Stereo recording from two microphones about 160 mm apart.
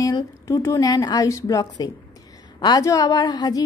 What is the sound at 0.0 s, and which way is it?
A woman's voice, 20° left (ahead or behind).